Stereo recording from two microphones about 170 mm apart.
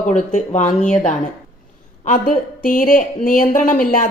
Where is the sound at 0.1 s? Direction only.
45° left (ahead or behind).